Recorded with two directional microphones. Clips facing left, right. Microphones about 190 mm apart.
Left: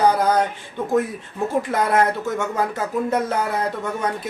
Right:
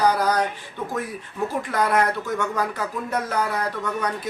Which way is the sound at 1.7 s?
25° left (ahead or behind).